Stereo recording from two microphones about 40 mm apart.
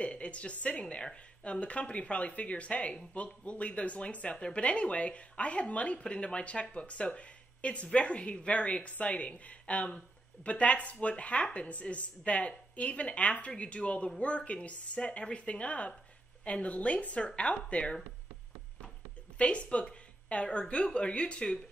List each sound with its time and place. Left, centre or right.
0.0 s a woman's voice: left
19.3 s a woman's voice: left